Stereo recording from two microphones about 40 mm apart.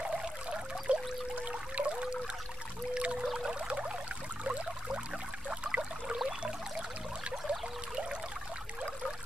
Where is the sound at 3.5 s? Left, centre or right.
Right.